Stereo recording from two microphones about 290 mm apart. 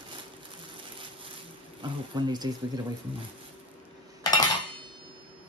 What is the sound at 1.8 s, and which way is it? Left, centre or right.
Speech, centre.